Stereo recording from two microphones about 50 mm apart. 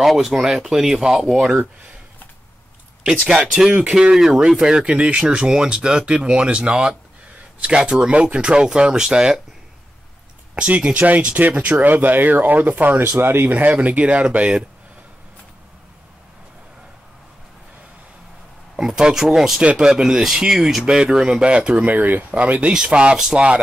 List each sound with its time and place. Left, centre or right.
0.0 s speech: centre
3.3 s speech: centre
10.5 s speech: right
13.0 s speech: right
13.5 s speech: right
18.8 s speech: centre
19.6 s speech: right